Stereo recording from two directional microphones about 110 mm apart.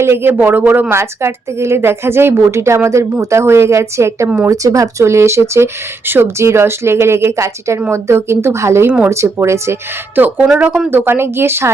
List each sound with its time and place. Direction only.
0.0 s speech: 20° right (ahead or behind)
10.2 s speech: 15° right (ahead or behind)
10.9 s speech: 20° right (ahead or behind)